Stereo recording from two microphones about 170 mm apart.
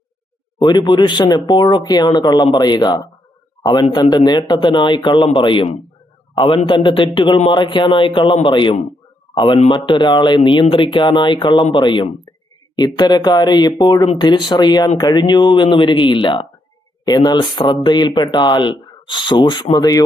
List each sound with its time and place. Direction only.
0.6 s a man's voice: 25° left (ahead or behind)